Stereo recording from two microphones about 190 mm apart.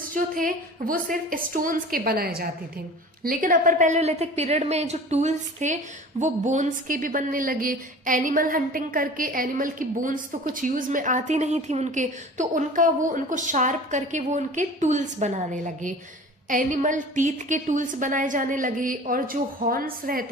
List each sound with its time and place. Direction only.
0.0 s a woman's voice: 45° right (ahead or behind)